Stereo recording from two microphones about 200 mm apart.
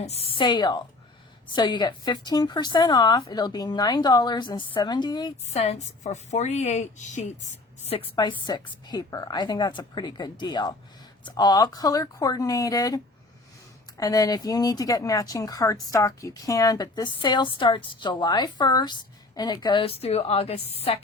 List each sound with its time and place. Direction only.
0.0 s speech: 30° left (ahead or behind)
5.5 s a woman's voice: 35° left (ahead or behind)
7.9 s speech: 25° left (ahead or behind)
14.0 s speech: 20° left (ahead or behind)